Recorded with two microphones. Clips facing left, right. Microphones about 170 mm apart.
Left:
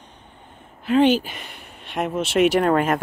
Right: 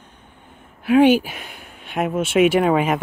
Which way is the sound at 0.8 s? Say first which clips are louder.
Right 3 dB; 10° right (ahead or behind).